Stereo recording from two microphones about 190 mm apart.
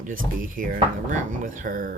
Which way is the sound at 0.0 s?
45° right (ahead or behind).